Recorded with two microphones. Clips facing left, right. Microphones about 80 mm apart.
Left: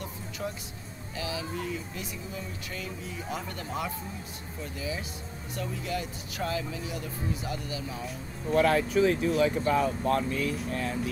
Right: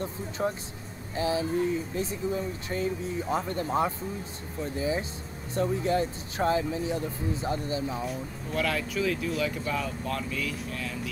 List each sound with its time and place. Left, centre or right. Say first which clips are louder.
0.4 s speech: right 6 dB; right
8.0 s speech: right 3 dB; centre
8.5 s speech: left 6 dB; left